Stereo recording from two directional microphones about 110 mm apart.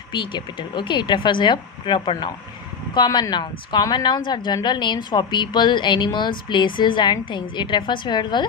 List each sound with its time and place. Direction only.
0.1 s a woman's voice: 45° left (ahead or behind)